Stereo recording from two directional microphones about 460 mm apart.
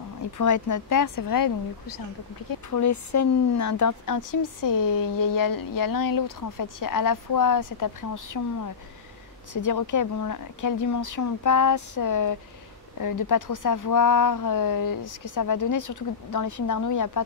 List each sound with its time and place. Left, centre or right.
0.4 s speech: left